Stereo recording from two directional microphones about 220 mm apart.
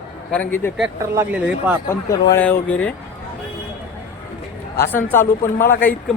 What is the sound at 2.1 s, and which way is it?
Speech, 10° left (ahead or behind).